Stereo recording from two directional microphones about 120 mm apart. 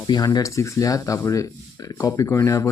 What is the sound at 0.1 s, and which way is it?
Speech, 35° left (ahead or behind).